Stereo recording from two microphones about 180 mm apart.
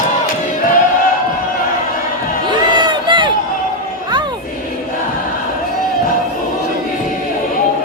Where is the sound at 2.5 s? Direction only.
25° right (ahead or behind).